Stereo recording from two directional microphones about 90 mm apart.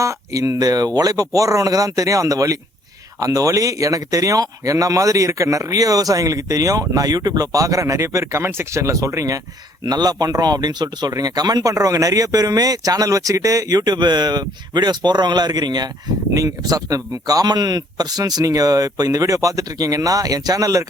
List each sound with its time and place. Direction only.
0.0 s speech: 40° right (ahead or behind)